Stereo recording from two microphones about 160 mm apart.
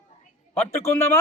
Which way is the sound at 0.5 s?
15° left (ahead or behind).